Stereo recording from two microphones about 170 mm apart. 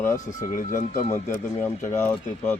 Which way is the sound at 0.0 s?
15° left (ahead or behind).